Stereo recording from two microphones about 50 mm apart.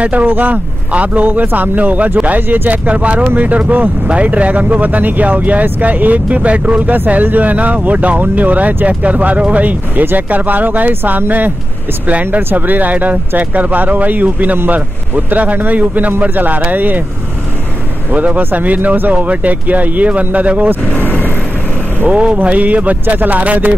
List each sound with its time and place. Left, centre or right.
0.2 s speech: right
2.9 s speech: right
18.1 s speech: right
21.0 s vehicle: left
22.0 s speech: right